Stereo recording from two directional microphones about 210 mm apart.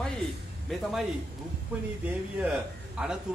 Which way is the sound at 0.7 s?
Centre (ahead or behind).